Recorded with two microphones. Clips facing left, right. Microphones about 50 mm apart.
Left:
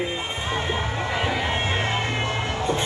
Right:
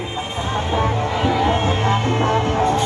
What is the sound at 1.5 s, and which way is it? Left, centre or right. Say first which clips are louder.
Music: right 6 dB; right.